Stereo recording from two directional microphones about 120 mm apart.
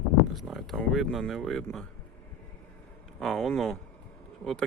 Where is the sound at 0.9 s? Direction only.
Centre (ahead or behind).